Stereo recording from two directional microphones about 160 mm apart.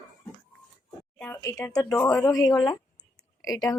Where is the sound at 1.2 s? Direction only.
15° left (ahead or behind).